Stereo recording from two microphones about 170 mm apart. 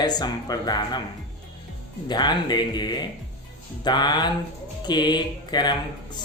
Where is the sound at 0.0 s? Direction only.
25° left (ahead or behind).